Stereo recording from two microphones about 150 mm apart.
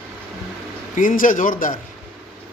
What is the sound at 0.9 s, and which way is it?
Speech, 65° left (ahead or behind).